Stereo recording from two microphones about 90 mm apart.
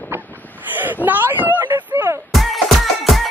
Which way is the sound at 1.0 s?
20° right (ahead or behind).